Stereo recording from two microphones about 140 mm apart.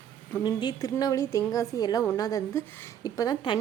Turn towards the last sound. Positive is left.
turn(degrees=25)  # may be behind; listen again after turning